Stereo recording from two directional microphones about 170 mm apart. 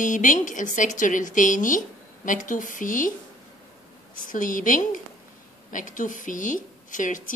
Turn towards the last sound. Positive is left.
turn(degrees=50)  # may be behind; listen again after turning